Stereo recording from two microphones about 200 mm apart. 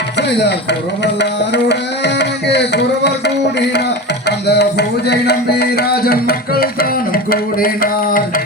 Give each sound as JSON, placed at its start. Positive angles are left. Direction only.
{"t": 0.2, "sound": "tabla", "side_deg": 55}